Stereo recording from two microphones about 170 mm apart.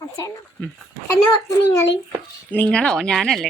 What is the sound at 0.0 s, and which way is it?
Speech, 20° left (ahead or behind).